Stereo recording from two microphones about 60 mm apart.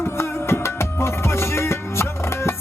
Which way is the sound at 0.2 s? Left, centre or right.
Left.